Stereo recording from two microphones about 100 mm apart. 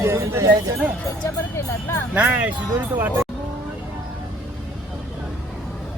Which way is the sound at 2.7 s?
25° right (ahead or behind).